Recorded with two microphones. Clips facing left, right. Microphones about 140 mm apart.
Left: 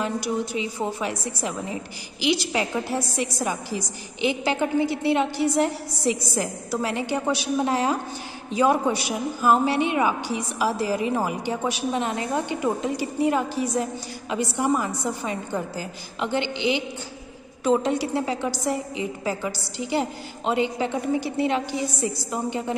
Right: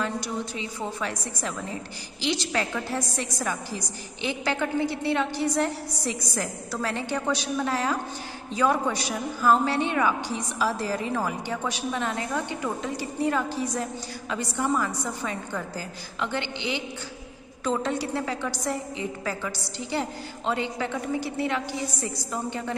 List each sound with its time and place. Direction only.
0.0 s a woman's voice: 15° left (ahead or behind)